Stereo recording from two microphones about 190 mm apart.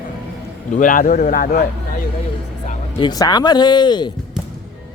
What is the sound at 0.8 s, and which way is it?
Speech, 45° left (ahead or behind).